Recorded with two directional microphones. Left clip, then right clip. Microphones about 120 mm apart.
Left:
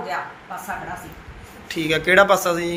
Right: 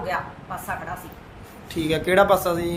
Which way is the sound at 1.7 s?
25° right (ahead or behind).